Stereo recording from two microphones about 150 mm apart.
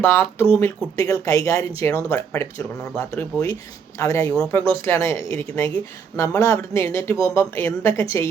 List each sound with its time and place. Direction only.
0.0 s speech: 15° left (ahead or behind)